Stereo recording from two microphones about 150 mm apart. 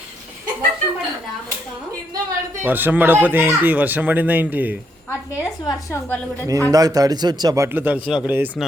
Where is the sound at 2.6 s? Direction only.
15° right (ahead or behind).